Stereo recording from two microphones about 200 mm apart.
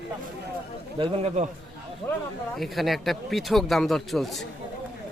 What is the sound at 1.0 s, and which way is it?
Speech, 30° right (ahead or behind).